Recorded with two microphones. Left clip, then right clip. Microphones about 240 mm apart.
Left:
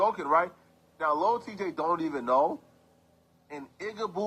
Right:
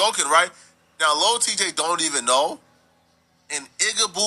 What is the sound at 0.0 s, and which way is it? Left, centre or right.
A man's voice, right.